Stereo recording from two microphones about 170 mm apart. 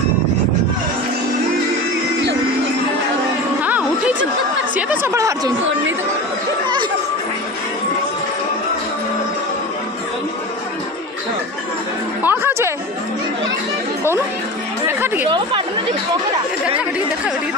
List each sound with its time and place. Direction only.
3.6 s a sound: 10° right (ahead or behind)
12.2 s music: 10° right (ahead or behind)
14.9 s chatter: 15° right (ahead or behind)
15.2 s chatter: 30° right (ahead or behind)